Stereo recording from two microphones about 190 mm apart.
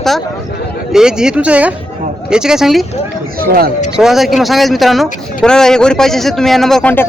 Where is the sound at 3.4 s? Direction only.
50° right (ahead or behind).